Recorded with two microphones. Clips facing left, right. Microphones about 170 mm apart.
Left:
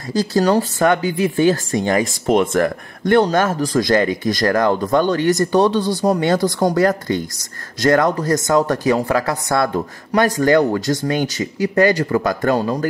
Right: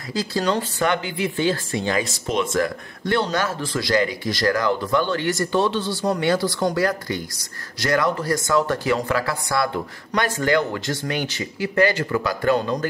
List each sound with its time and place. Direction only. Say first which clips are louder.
0.3 s speech: left 7 dB; 40° left (ahead or behind)
2.2 s speech: left 7 dB; 60° left (ahead or behind)
5.0 s speech: left 7 dB; 20° left (ahead or behind)
6.0 s speech: left 3 dB; 30° left (ahead or behind)
6.3 s speech: left 5 dB; 40° left (ahead or behind)